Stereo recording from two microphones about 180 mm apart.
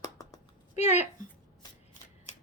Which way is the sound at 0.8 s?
40° left (ahead or behind).